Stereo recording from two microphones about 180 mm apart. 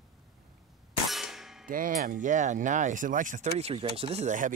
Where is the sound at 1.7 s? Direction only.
50° right (ahead or behind).